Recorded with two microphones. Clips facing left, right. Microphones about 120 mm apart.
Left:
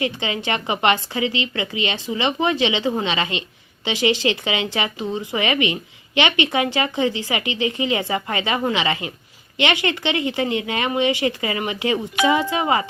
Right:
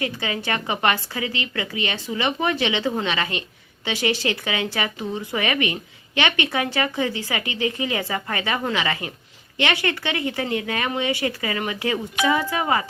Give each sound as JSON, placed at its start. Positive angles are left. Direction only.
{"t": 0.0, "sound": "a woman's voice", "side_deg": 20}